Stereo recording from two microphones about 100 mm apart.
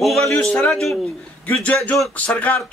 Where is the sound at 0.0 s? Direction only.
Centre (ahead or behind).